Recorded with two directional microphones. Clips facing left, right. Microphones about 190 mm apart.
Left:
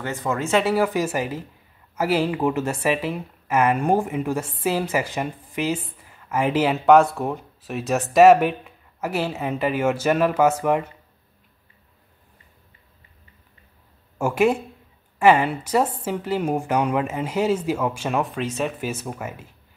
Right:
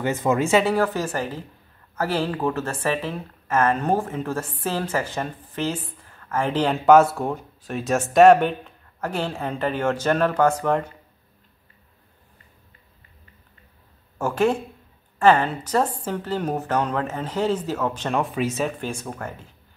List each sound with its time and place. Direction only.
0.0 s speech: 20° right (ahead or behind)
0.5 s speech: centre (ahead or behind)
0.7 s a woman's voice: 10° left (ahead or behind)
14.1 s a woman's voice: 10° left (ahead or behind)